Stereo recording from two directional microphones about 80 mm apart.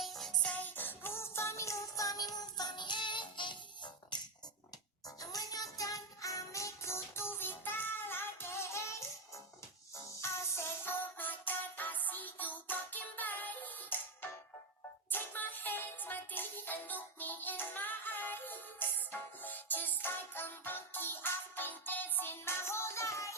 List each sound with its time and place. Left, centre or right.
0.0 s music: centre
0.4 s music: centre; by 3.6 s left
5.0 s music: left
10.2 s music: left
15.1 s music: left